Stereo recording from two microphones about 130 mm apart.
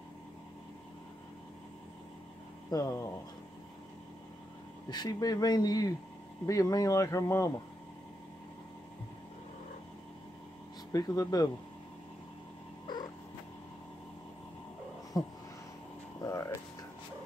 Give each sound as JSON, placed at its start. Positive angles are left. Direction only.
{"t": 2.7, "sound": "speech", "side_deg": 25}
{"t": 4.8, "sound": "speech", "side_deg": 30}
{"t": 10.9, "sound": "speech", "side_deg": 25}
{"t": 12.8, "sound": "a sound", "side_deg": 35}
{"t": 15.2, "sound": "speech", "side_deg": 35}
{"t": 16.2, "sound": "a sound", "side_deg": 25}